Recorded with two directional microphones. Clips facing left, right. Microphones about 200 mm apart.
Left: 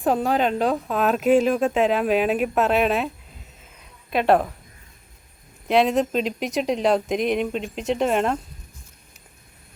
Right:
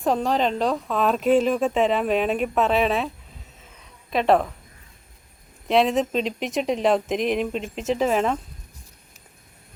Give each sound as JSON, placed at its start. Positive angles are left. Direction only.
{"t": 0.0, "sound": "speech", "side_deg": 5}
{"t": 4.1, "sound": "speech", "side_deg": 0}
{"t": 5.6, "sound": "speech", "side_deg": 0}